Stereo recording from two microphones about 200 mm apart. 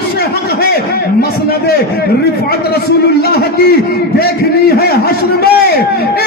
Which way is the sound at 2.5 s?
55° left (ahead or behind).